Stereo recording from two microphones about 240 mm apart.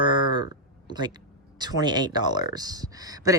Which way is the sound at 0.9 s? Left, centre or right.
Centre.